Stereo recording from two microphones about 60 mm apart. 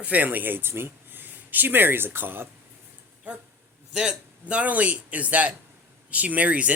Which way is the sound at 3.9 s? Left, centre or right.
Centre.